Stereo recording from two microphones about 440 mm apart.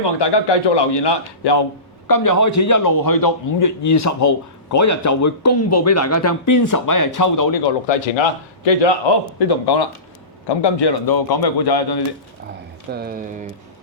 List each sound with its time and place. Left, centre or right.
0.0 s a man's voice: left
2.0 s a man's voice: left
7.9 s a man's voice: left
9.4 s a man's voice: left
12.9 s speech: centre